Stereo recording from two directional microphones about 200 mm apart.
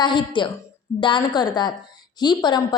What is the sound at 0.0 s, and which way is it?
A woman's voice, 20° left (ahead or behind).